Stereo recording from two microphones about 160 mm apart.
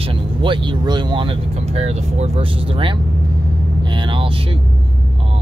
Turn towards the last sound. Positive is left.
turn(degrees=-35)  # may be behind; listen again after turning